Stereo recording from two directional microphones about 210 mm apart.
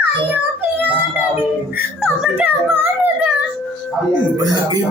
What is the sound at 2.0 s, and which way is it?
Speech, 5° right (ahead or behind).